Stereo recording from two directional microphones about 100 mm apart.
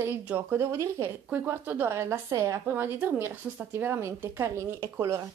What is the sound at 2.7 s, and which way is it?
A woman's voice, 20° right (ahead or behind).